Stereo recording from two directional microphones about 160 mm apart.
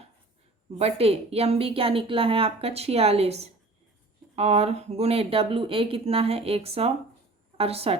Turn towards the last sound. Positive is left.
turn(degrees=-40)  # may be behind; listen again after turning